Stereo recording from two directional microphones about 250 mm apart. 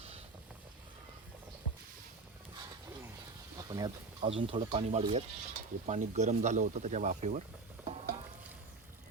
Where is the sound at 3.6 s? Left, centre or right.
Centre.